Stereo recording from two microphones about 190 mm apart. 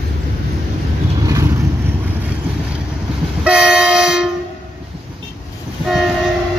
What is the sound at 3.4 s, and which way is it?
Train, 5° right (ahead or behind).